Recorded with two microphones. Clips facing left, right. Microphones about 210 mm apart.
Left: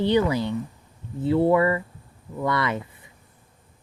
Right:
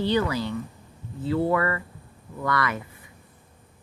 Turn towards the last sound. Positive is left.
turn(degrees=25)  # may be behind; listen again after turning